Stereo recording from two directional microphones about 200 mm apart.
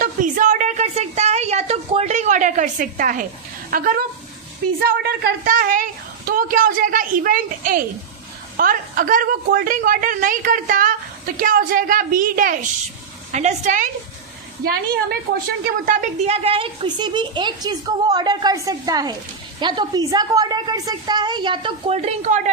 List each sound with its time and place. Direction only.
0.0 s a sound: 40° right (ahead or behind)
3.7 s a woman's voice: 45° right (ahead or behind)
15.9 s a woman's voice: 35° right (ahead or behind)